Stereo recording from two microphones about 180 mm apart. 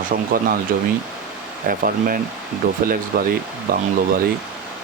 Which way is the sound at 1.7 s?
55° right (ahead or behind).